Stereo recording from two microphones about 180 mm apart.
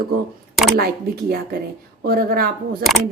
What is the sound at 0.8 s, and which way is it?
A woman's voice, 60° right (ahead or behind).